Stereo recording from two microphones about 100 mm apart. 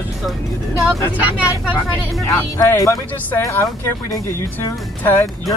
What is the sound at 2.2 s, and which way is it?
Speech, 30° left (ahead or behind).